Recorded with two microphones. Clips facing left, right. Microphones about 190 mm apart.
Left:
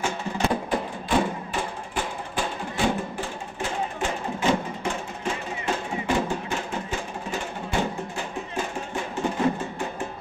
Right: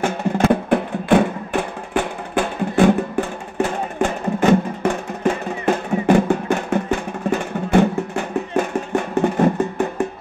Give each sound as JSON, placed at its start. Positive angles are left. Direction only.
{"t": 0.0, "sound": "music", "side_deg": -60}